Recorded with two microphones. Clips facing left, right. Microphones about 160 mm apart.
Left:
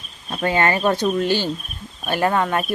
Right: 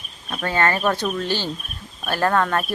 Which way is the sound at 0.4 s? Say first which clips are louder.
Left 2 dB; 15° left (ahead or behind).